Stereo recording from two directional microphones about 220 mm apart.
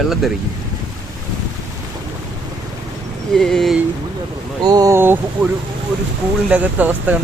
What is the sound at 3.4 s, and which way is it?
Speech, centre (ahead or behind).